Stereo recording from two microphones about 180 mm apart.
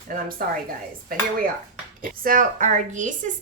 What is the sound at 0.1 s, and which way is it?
A woman's voice, 50° right (ahead or behind).